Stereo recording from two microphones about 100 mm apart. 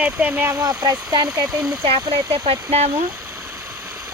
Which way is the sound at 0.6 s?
35° right (ahead or behind).